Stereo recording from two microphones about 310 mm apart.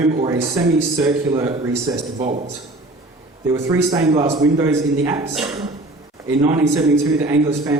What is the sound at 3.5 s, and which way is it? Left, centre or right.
Speech, centre.